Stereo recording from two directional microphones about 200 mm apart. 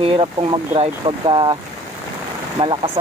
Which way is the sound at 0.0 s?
30° right (ahead or behind).